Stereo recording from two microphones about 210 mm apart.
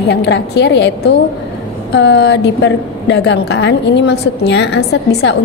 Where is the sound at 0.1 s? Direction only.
55° left (ahead or behind).